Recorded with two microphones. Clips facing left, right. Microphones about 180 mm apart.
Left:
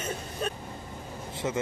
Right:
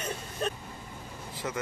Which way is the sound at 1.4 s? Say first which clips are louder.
Left 4 dB; 20° left (ahead or behind).